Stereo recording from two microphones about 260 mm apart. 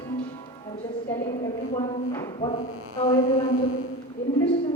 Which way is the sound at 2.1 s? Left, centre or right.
Centre.